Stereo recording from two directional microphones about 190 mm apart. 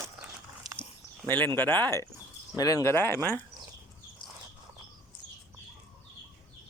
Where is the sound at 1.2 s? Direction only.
10° left (ahead or behind).